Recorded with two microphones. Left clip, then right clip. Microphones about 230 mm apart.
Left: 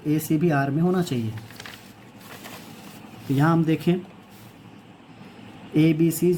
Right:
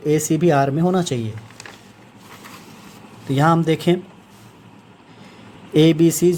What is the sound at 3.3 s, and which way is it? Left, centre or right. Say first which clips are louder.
Speech: right 6 dB; right.